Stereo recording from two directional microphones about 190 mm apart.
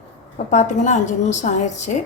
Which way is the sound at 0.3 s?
40° left (ahead or behind).